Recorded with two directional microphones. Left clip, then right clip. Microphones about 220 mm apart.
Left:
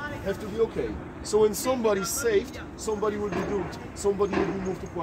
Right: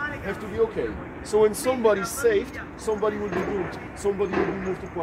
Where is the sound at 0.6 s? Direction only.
45° left (ahead or behind).